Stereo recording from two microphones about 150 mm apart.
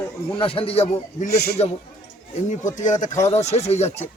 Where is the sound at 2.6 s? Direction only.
55° left (ahead or behind).